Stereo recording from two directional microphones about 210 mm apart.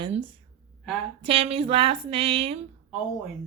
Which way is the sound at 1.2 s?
25° right (ahead or behind).